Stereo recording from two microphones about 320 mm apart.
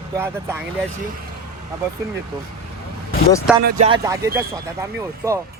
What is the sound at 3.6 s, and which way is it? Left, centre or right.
Speech, right.